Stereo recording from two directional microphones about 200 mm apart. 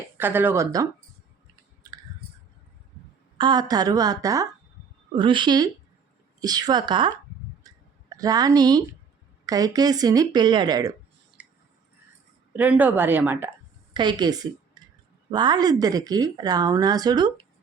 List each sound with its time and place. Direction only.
0.2 s speech: 10° right (ahead or behind)
3.3 s speech: 20° right (ahead or behind)
7.6 s clicking: 20° right (ahead or behind)
8.1 s speech: 20° right (ahead or behind)
11.4 s a sound: 5° right (ahead or behind)
12.5 s speech: 10° right (ahead or behind)
13.9 s a woman's voice: 20° right (ahead or behind)
14.8 s a sound: 20° right (ahead or behind)
15.3 s speech: 20° right (ahead or behind)